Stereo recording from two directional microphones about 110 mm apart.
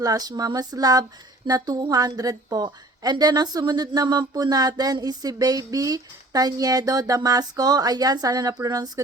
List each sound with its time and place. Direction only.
0.0 s a woman's voice: 35° right (ahead or behind)